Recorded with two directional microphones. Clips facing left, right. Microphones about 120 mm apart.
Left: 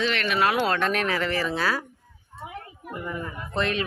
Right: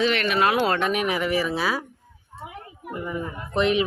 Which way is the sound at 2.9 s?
10° right (ahead or behind).